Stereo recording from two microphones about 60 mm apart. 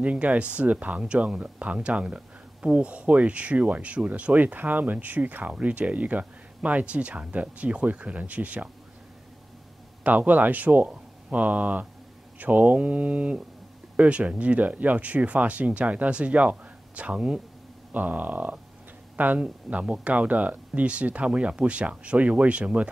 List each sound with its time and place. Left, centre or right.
0.0 s speech: right
10.0 s speech: right